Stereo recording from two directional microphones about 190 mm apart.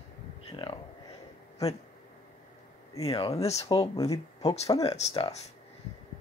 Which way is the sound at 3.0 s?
30° left (ahead or behind).